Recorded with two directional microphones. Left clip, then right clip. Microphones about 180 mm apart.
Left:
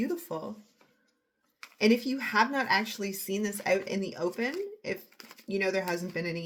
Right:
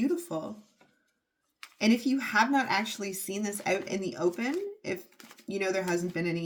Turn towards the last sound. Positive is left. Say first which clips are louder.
# right 3 dB
turn(degrees=30)  # may be behind; listen again after turning